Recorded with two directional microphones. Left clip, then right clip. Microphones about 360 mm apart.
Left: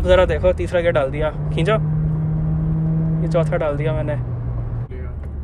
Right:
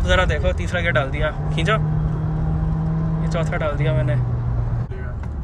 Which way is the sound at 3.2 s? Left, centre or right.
Centre.